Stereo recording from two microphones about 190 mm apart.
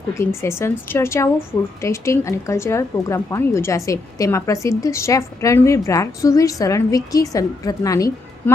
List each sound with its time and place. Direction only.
0.1 s speech: 15° left (ahead or behind)